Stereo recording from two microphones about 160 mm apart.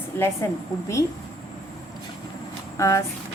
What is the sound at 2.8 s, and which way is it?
Speech, 20° left (ahead or behind).